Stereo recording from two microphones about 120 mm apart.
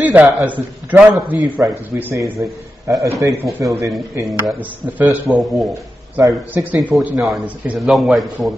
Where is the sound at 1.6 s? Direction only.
20° right (ahead or behind).